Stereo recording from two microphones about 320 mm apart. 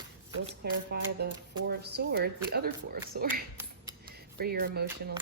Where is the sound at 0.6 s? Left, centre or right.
Right.